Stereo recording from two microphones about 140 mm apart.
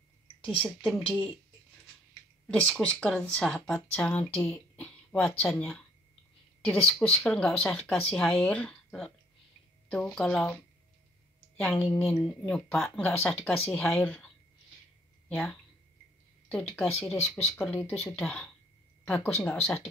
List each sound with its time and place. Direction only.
0.6 s speech: 10° left (ahead or behind)
2.4 s speech: 5° left (ahead or behind)
4.4 s speech: 20° left (ahead or behind)
5.1 s speech: 10° left (ahead or behind)
11.6 s speech: 10° left (ahead or behind)
13.3 s speech: 15° left (ahead or behind)
15.2 s speech: 10° left (ahead or behind)